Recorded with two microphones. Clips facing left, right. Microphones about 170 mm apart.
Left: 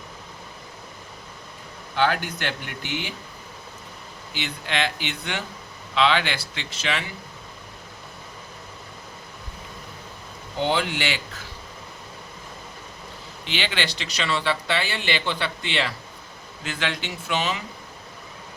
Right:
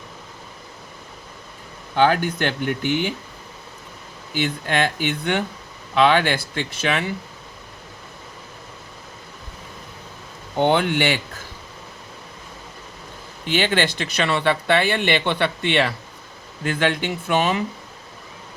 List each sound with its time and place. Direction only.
2.0 s speech: 50° right (ahead or behind)
4.4 s speech: 50° right (ahead or behind)
10.6 s speech: 55° right (ahead or behind)
13.4 s speech: 45° right (ahead or behind)